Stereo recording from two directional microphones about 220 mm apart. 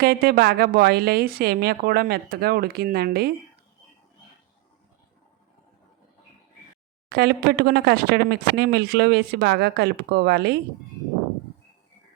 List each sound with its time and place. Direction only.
0.0 s speech: 45° right (ahead or behind)
7.1 s speech: 45° right (ahead or behind)